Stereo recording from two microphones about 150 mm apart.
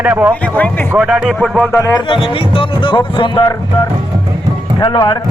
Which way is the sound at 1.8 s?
25° left (ahead or behind).